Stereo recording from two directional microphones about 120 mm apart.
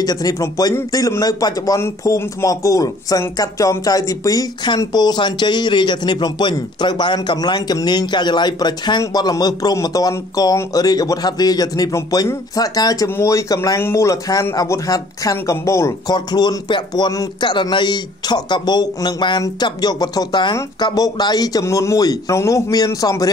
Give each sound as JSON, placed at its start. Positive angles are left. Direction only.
{"t": 0.0, "sound": "speech", "side_deg": 30}